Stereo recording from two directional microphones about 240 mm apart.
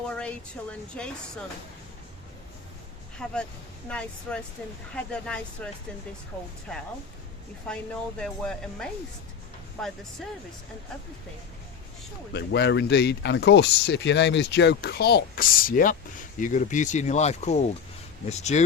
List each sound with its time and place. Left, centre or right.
0.1 s speech: centre
3.2 s speech: centre
7.7 s speech: centre
12.3 s speech: left